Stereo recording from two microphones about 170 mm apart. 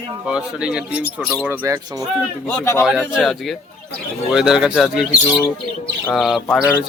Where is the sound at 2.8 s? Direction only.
Centre (ahead or behind).